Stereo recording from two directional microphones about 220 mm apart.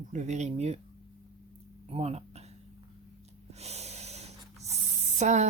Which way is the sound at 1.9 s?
30° right (ahead or behind).